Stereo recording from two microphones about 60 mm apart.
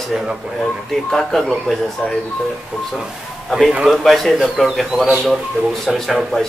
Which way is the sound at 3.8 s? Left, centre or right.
Centre.